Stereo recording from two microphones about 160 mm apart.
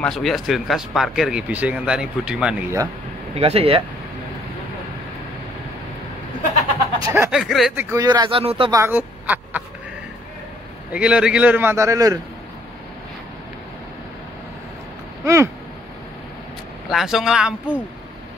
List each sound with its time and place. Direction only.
0.0 s speech: centre (ahead or behind)
3.3 s speech: 40° right (ahead or behind)
7.0 s speech: 20° right (ahead or behind)
7.2 s speech: centre (ahead or behind)
7.7 s speech: 20° right (ahead or behind)
8.7 s speech: 15° right (ahead or behind)
10.9 s a man's voice: 5° right (ahead or behind)
15.2 s a man's voice: 15° right (ahead or behind)
16.9 s speech: centre (ahead or behind)